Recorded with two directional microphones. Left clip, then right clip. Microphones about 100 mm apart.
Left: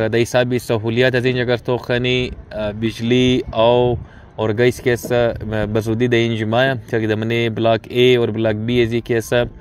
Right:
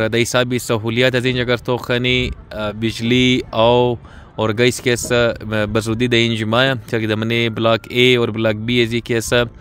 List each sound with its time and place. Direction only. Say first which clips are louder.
0.0 s speech: even; 40° right (ahead or behind)